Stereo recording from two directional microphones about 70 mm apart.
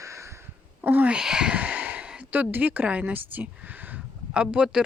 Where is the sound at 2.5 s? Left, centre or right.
Right.